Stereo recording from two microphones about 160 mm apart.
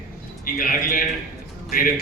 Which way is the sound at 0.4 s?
60° left (ahead or behind).